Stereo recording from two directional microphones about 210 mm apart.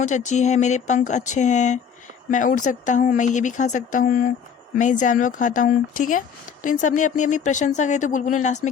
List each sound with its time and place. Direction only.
0.0 s speech: 35° left (ahead or behind)